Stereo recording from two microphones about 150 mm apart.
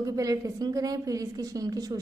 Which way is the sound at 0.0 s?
25° right (ahead or behind).